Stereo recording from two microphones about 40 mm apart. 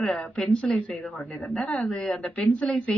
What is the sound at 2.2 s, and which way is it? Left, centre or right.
Speech, left.